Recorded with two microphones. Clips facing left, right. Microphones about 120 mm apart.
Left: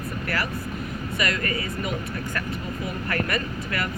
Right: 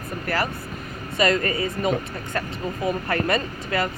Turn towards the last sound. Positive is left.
turn(degrees=-25)  # may be behind; listen again after turning